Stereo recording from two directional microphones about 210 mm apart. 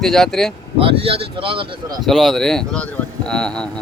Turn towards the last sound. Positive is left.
turn(degrees=5)  # may be behind; listen again after turning